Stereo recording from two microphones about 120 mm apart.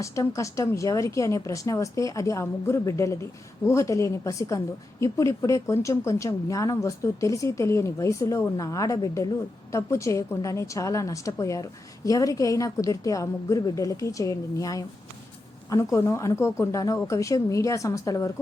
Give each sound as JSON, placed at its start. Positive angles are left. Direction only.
{"t": 0.0, "sound": "a woman's voice", "side_deg": 25}